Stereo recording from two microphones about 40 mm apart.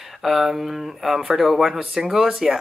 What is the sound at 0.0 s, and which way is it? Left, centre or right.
Speech, centre.